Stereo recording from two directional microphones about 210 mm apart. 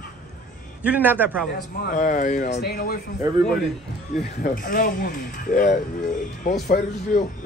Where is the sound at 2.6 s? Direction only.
45° left (ahead or behind).